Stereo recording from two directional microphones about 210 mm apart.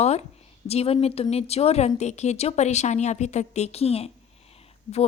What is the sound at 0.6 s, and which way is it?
A woman's voice, 30° left (ahead or behind).